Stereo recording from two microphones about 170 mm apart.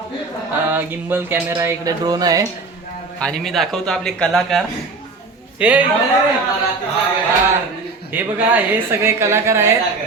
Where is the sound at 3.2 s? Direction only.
Centre (ahead or behind).